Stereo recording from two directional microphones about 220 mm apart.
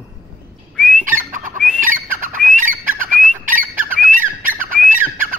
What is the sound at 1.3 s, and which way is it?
Squawk, 35° right (ahead or behind).